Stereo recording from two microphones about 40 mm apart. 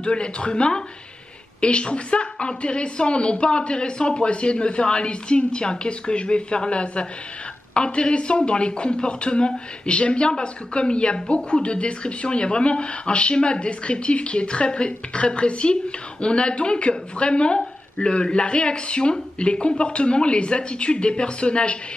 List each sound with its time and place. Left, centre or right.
0.0 s speech: left